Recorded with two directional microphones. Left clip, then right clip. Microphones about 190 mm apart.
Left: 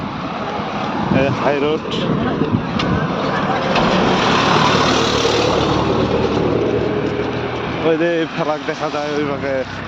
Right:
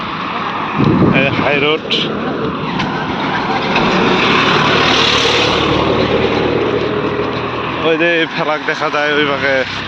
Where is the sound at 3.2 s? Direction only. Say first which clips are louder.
Right 3 dB; 50° left (ahead or behind).